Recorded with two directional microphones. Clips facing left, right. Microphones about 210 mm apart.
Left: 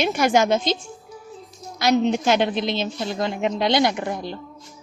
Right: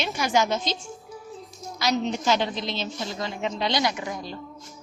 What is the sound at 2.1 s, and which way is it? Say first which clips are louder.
Speech: left 5 dB; 60° left (ahead or behind).